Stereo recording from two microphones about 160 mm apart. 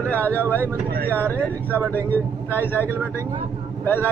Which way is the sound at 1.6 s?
15° right (ahead or behind).